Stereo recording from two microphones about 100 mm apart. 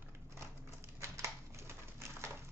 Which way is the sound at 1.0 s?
30° right (ahead or behind).